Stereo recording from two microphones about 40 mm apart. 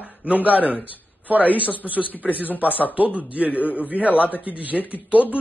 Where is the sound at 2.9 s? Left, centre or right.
Right.